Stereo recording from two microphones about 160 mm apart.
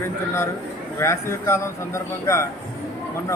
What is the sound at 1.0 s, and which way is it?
A man's voice, 15° left (ahead or behind).